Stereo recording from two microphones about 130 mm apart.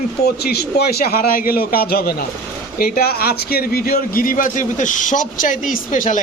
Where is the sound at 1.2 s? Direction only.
90° left.